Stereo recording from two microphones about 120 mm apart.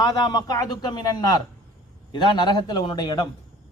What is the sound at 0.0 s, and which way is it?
A man's voice, 30° left (ahead or behind).